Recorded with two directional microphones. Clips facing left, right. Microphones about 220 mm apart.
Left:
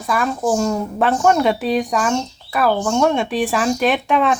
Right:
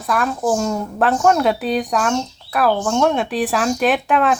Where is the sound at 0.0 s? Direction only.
Centre (ahead or behind).